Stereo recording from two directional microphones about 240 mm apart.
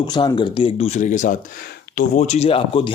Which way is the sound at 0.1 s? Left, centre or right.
Centre.